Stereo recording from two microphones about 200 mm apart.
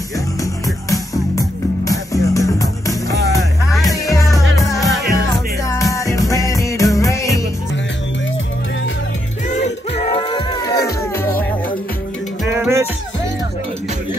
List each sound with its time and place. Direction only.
1.9 s music: 15° left (ahead or behind)
9.5 s music: 35° left (ahead or behind)
12.4 s music: 10° right (ahead or behind)